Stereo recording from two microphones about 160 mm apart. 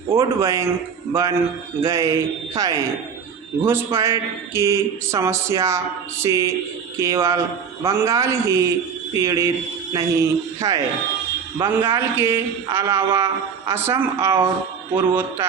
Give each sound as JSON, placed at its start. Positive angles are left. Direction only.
{"t": 0.1, "sound": "speech", "side_deg": -15}
{"t": 1.8, "sound": "speech", "side_deg": -20}